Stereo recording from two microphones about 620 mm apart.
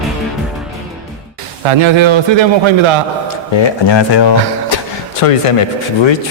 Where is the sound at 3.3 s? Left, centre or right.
Left.